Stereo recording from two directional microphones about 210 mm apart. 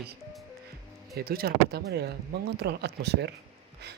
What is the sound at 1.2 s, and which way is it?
Speech, 45° right (ahead or behind).